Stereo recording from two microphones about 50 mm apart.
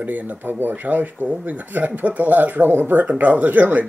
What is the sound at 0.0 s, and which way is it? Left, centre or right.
Speech, right.